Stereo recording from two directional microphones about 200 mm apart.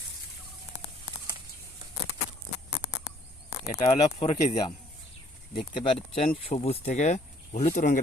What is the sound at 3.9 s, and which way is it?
Speech, 35° left (ahead or behind).